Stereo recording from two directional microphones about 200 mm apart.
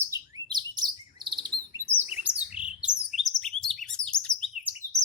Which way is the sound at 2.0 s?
10° right (ahead or behind).